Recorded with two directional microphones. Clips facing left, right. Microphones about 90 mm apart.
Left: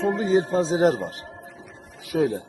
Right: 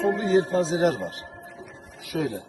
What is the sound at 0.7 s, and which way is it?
A man's voice, 35° left (ahead or behind).